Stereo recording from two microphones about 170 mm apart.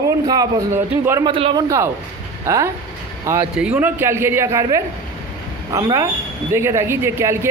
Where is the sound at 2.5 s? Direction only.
15° right (ahead or behind).